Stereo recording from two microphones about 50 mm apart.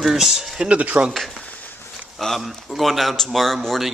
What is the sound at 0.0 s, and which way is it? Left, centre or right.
Speech, centre.